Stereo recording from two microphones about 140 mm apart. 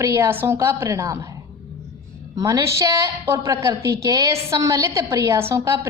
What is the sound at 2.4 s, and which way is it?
A woman's voice, 25° right (ahead or behind).